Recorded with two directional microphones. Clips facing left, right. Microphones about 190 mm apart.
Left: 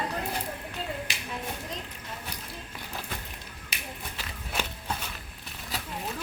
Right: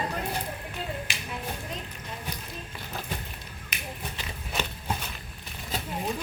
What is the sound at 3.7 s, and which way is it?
Whip, 30° left (ahead or behind).